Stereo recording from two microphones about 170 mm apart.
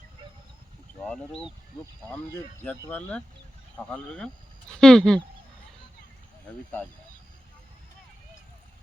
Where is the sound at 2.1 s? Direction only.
15° left (ahead or behind).